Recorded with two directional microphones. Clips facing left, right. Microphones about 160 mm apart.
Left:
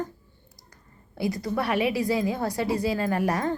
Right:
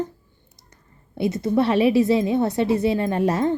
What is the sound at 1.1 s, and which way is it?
A woman's voice, 25° right (ahead or behind).